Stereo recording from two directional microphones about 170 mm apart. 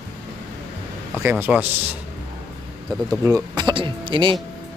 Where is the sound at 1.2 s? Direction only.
10° right (ahead or behind).